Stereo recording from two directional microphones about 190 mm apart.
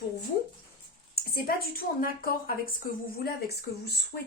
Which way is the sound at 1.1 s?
50° left (ahead or behind).